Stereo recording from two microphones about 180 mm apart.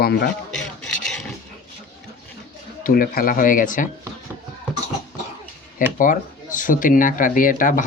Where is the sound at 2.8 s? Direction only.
55° left (ahead or behind).